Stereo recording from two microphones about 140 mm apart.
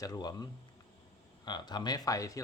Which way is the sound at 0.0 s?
30° left (ahead or behind).